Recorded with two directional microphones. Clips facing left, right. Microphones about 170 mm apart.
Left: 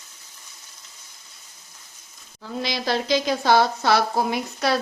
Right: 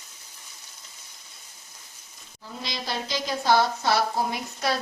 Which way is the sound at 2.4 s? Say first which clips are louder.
Left 8 dB; 80° left.